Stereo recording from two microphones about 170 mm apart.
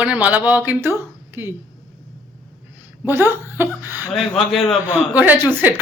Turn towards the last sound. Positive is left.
turn(degrees=-10)  # may be behind; listen again after turning